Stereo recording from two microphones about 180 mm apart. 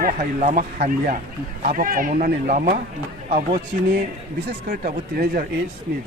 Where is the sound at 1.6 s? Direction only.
50° right (ahead or behind).